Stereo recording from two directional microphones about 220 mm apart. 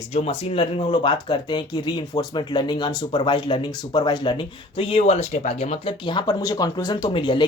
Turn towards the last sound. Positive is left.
turn(degrees=20)  # may be behind; listen again after turning